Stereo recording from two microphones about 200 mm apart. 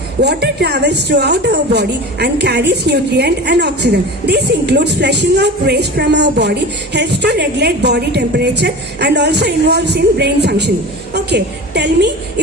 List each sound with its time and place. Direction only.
0.2 s a woman's voice: 55° right (ahead or behind)